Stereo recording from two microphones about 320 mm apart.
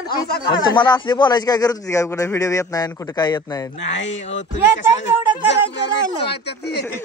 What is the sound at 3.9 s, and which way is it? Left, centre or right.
Speech, left.